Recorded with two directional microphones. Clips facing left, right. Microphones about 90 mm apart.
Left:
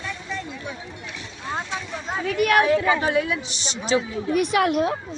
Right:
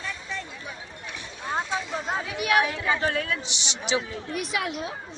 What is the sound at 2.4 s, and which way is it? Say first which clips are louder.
Speech: left 6 dB; 45° left (ahead or behind).